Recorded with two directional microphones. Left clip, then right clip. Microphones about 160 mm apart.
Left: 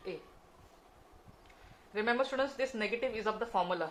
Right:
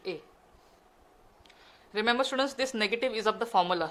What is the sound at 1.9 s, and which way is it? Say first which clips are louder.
A woman's voice: right 4 dB; 50° right (ahead or behind).